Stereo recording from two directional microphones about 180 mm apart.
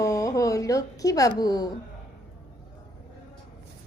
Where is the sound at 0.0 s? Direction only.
20° left (ahead or behind).